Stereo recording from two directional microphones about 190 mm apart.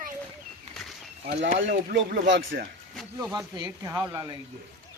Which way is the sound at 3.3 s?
20° right (ahead or behind).